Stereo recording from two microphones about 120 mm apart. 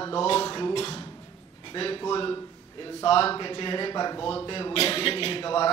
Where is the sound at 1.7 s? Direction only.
45° left (ahead or behind).